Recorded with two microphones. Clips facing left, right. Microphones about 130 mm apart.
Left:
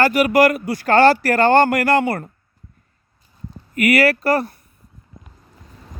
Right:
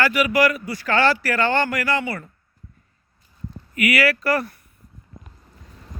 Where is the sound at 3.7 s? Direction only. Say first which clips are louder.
Left 5 dB; 45° left (ahead or behind).